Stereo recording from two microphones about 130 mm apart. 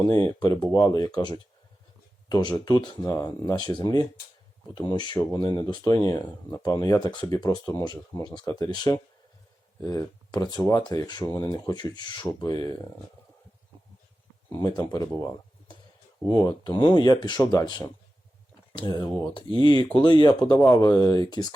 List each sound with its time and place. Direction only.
0.1 s speech: 30° left (ahead or behind)
14.6 s speech: 30° left (ahead or behind)